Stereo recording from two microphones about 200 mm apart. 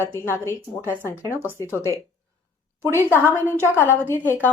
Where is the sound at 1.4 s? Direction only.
10° right (ahead or behind).